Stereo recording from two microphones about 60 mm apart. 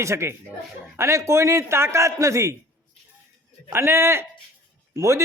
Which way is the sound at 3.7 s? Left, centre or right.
Right.